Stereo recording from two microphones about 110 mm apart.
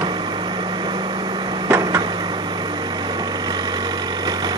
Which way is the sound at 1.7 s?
30° right (ahead or behind).